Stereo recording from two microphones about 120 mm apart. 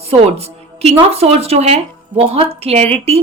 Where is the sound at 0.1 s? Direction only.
60° right (ahead or behind).